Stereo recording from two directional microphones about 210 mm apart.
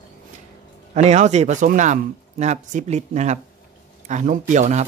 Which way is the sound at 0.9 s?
35° right (ahead or behind).